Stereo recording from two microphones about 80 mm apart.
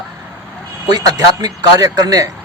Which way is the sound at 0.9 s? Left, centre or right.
Right.